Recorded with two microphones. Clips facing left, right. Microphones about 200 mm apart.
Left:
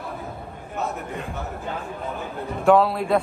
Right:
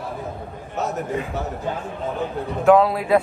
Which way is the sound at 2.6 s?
Centre (ahead or behind).